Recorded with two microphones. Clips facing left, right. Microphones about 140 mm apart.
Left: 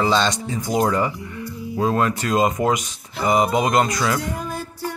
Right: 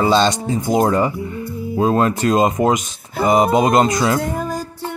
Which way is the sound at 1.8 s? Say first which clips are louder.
Right 4 dB; 25° right (ahead or behind).